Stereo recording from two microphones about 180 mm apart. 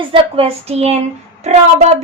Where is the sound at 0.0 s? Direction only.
30° right (ahead or behind).